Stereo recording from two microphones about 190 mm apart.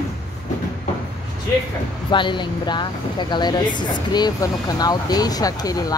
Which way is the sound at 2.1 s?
25° left (ahead or behind).